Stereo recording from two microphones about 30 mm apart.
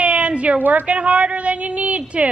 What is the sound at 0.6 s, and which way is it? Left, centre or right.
Speech, right.